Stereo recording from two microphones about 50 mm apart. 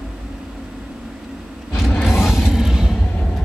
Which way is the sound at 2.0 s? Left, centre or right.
Centre.